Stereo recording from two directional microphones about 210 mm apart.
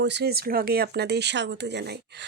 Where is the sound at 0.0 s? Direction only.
55° right (ahead or behind).